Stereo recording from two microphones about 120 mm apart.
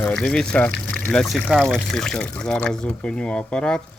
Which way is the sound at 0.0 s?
10° left (ahead or behind).